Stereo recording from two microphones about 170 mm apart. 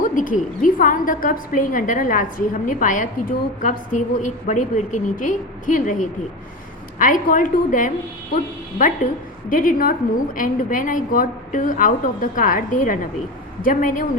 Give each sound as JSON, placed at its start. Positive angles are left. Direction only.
{"t": 0.0, "sound": "a woman's voice", "side_deg": 50}
{"t": 9.5, "sound": "a woman's voice", "side_deg": 55}